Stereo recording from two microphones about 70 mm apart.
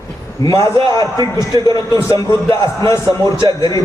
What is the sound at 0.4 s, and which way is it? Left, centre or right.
Speech, left.